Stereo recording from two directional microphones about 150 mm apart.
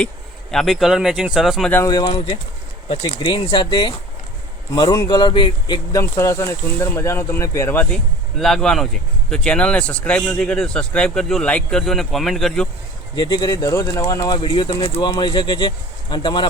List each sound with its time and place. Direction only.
0.5 s speech: centre (ahead or behind)
1.9 s speech: 30° left (ahead or behind)
2.1 s speech: 40° left (ahead or behind); by 7.9 s 15° left (ahead or behind)
8.4 s speech: centre (ahead or behind)
13.1 s speech: 30° left (ahead or behind)